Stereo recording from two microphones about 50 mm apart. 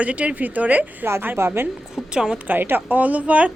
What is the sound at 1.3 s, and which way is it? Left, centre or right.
Speech, right.